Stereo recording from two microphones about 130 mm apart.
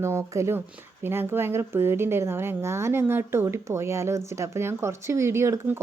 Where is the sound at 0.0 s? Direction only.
20° right (ahead or behind).